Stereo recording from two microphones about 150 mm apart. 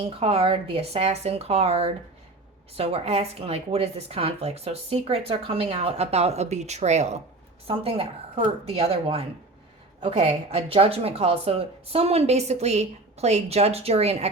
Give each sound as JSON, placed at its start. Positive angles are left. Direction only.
{"t": 0.0, "sound": "speech", "side_deg": -40}
{"t": 7.7, "sound": "speech", "side_deg": -40}